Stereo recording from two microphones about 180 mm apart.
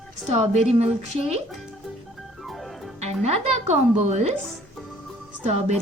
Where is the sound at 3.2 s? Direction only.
35° right (ahead or behind).